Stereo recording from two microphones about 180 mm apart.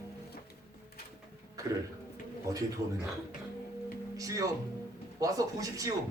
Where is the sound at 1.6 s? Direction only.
20° right (ahead or behind).